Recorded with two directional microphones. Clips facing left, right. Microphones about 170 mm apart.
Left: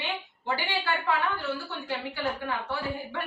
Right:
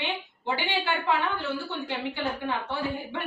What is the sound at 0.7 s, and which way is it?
Speech, 20° right (ahead or behind).